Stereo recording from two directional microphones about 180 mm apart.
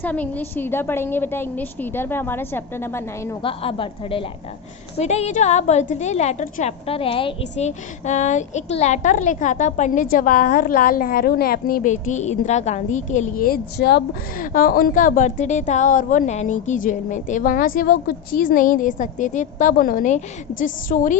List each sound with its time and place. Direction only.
0.0 s a woman's voice: 10° left (ahead or behind)
3.4 s a woman's voice: 30° left (ahead or behind); by 14.0 s 65° left (ahead or behind)
14.5 s a woman's voice: 55° left (ahead or behind)